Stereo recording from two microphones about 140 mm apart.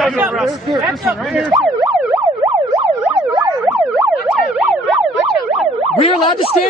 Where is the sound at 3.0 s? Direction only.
25° right (ahead or behind).